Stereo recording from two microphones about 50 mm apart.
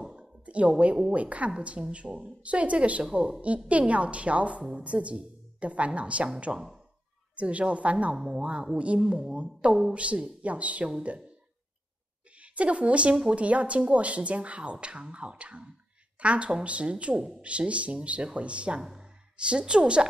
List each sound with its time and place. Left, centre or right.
0.0 s a sound: centre
0.5 s speech: right
7.3 s speech: right
12.4 s speech: right
18.8 s speech: centre